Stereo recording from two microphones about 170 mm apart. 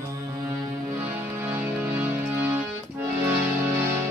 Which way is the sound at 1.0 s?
10° right (ahead or behind).